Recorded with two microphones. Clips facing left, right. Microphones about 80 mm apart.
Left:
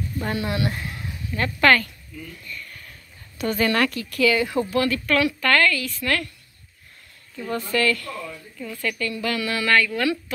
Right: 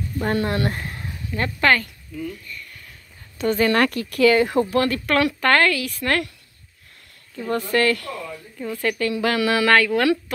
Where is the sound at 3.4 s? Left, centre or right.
Right.